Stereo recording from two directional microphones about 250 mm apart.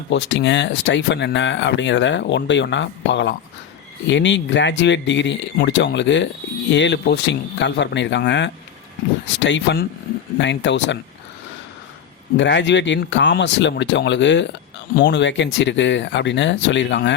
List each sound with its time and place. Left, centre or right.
0.1 s speech: left
12.4 s speech: left